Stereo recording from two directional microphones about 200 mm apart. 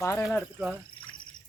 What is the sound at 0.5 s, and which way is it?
Speech, 5° right (ahead or behind).